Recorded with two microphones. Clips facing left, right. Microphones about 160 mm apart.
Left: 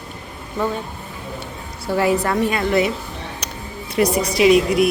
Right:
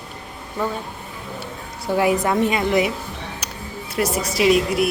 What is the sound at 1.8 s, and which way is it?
A woman's voice, 15° right (ahead or behind).